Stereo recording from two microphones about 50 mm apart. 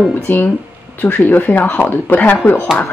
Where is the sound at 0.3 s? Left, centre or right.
Left.